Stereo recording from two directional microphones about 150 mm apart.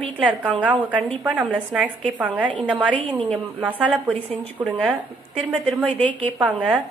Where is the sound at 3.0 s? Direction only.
35° right (ahead or behind).